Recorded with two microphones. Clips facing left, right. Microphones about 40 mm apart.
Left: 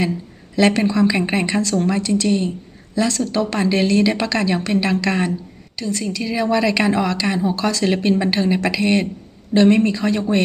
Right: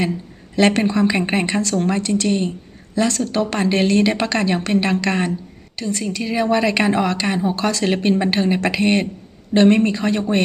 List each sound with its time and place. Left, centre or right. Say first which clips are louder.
0.5 s a woman's voice: even; right
2.0 s speech: left 1 dB; right
2.2 s speech: left 1 dB; right